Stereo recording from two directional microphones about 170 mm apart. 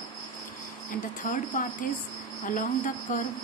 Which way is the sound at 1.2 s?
50° left (ahead or behind).